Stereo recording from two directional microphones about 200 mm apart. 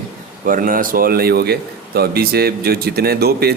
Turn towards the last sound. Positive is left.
turn(degrees=-50)  # may be behind; listen again after turning